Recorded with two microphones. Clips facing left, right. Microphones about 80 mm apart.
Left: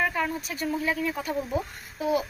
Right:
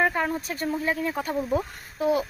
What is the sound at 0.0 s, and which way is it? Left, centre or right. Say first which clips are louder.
A woman's voice: right 3 dB; right.